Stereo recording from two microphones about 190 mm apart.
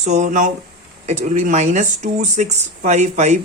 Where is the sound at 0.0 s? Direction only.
40° right (ahead or behind).